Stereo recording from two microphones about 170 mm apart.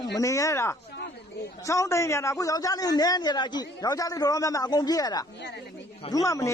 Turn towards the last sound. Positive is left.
turn(degrees=20)  # may be behind; listen again after turning